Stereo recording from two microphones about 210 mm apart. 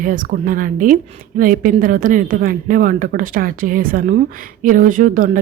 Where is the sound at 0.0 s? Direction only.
40° right (ahead or behind).